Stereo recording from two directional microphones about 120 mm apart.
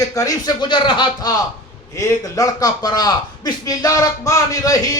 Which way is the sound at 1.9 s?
25° left (ahead or behind).